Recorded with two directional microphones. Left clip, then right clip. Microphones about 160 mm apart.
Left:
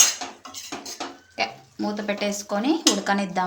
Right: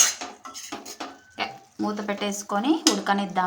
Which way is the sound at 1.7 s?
Centre (ahead or behind).